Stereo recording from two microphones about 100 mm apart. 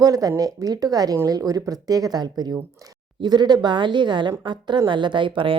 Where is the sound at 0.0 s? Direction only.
40° right (ahead or behind).